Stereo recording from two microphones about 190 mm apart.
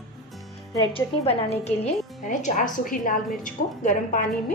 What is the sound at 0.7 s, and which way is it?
Speech, 20° left (ahead or behind).